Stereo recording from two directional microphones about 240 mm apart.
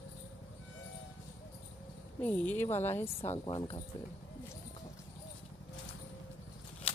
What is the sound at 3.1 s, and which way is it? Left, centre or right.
Speech, left.